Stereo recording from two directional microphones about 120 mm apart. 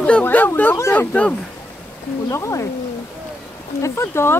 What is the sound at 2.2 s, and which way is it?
Speech, 25° left (ahead or behind).